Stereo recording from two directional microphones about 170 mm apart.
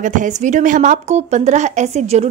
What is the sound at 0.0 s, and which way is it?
A woman's voice, 50° right (ahead or behind).